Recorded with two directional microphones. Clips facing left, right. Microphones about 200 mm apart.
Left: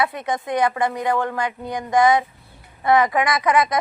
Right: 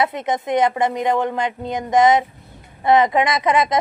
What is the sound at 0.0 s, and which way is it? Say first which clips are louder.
Speech: right 2 dB; 20° right (ahead or behind).